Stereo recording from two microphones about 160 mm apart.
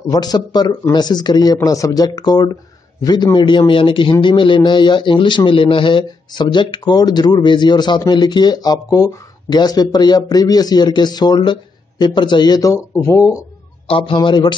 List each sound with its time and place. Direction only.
0.1 s a man's voice: 25° left (ahead or behind)
13.8 s a man's voice: 35° left (ahead or behind)